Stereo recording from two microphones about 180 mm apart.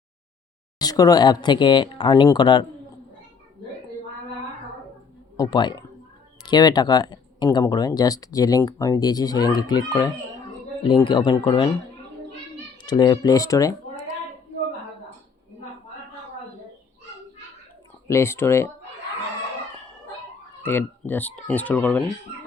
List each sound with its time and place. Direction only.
0.8 s speech: 20° left (ahead or behind)
5.4 s speech: 25° left (ahead or behind)
12.8 s speech: 25° left (ahead or behind)
18.1 s speech: 15° left (ahead or behind)
20.6 s speech: 10° left (ahead or behind)